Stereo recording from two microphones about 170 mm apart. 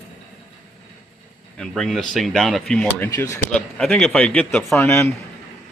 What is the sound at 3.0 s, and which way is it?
Speech, 20° left (ahead or behind).